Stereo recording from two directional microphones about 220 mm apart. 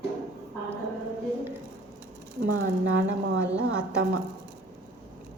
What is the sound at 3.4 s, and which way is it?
Speech, 5° right (ahead or behind).